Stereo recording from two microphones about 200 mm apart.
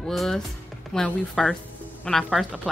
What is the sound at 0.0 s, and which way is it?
Speech, centre (ahead or behind).